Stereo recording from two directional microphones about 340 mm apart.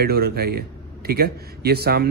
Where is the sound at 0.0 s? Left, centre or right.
Right.